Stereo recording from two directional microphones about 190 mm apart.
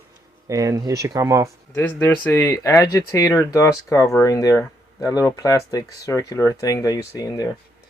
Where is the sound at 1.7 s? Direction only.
10° left (ahead or behind).